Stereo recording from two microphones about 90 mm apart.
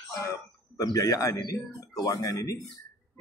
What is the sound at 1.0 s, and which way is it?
A man's voice, 40° left (ahead or behind).